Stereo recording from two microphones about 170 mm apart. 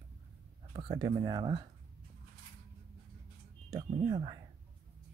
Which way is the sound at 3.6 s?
25° right (ahead or behind).